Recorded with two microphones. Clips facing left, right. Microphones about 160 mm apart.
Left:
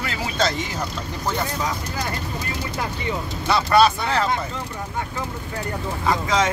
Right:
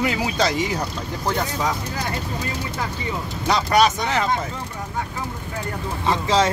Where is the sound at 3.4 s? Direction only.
15° right (ahead or behind).